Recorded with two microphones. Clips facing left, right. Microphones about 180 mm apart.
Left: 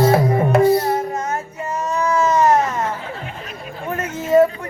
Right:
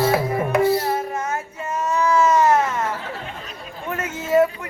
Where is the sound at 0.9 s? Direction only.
25° left (ahead or behind).